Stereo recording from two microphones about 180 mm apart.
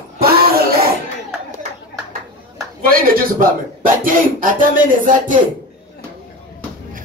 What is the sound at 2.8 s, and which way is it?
Speech, 50° right (ahead or behind).